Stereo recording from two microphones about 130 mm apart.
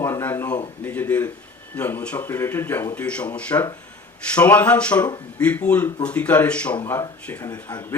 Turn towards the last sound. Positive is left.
turn(degrees=30)  # may be behind; listen again after turning